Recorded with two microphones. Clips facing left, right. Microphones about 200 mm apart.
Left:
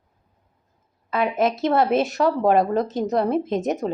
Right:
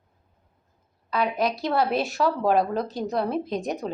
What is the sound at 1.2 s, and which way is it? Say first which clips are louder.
Speech: left 5 dB; 20° left (ahead or behind).